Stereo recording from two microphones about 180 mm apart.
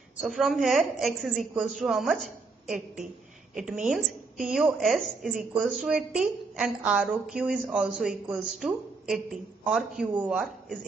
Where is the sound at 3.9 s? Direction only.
Centre (ahead or behind).